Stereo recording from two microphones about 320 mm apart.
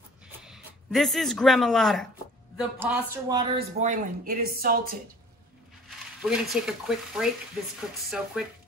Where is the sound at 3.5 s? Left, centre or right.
Right.